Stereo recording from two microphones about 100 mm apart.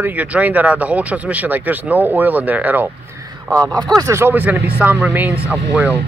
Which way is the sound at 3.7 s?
40° right (ahead or behind).